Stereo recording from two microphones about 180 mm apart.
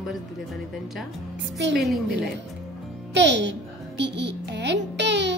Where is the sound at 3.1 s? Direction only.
75° right (ahead or behind).